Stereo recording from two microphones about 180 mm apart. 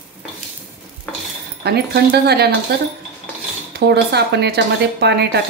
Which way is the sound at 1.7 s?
65° right (ahead or behind).